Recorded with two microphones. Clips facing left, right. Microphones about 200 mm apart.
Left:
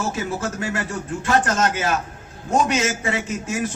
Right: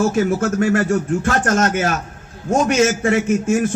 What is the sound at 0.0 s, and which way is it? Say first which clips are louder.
A man's voice: right 8 dB; 50° right (ahead or behind).